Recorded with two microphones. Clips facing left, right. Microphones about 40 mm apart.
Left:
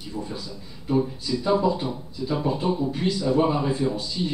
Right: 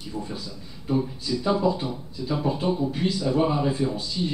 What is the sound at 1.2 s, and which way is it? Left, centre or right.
A man's voice, centre.